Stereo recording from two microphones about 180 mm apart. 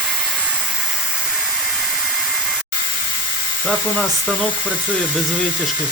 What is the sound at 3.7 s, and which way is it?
Speech, 10° left (ahead or behind).